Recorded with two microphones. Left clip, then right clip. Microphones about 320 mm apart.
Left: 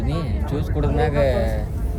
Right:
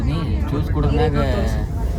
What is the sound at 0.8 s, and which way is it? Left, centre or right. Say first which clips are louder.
Speech: left 1 dB; centre.